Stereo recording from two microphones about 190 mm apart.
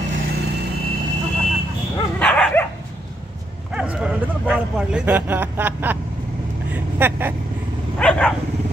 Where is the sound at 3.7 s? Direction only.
5° right (ahead or behind).